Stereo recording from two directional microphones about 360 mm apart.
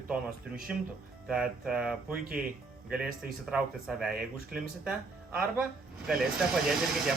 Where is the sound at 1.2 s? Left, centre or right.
Centre.